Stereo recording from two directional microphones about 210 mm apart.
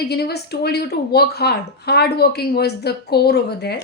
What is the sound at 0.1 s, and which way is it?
Speech, 50° left (ahead or behind).